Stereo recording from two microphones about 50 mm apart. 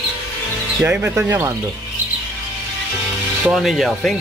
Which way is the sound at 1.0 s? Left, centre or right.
Right.